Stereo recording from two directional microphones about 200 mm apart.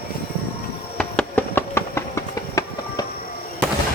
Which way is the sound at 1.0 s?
5° left (ahead or behind).